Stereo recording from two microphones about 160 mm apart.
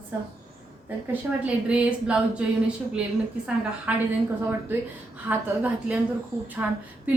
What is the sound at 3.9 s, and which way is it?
A woman's voice, 10° right (ahead or behind).